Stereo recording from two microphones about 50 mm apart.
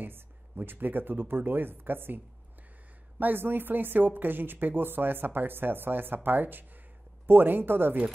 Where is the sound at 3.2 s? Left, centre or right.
Right.